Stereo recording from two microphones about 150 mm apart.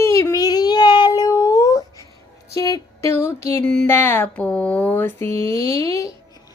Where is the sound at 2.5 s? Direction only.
25° left (ahead or behind).